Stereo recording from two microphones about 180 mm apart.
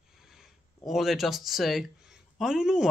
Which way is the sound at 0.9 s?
Centre (ahead or behind).